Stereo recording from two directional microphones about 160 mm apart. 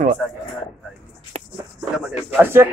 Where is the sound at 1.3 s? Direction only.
40° right (ahead or behind).